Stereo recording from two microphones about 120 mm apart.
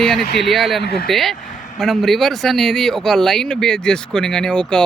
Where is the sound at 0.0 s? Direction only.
5° left (ahead or behind).